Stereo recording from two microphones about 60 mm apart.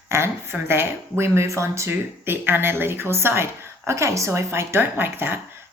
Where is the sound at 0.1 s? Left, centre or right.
Right.